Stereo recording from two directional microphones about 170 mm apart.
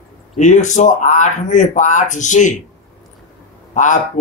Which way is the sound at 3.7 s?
45° left (ahead or behind).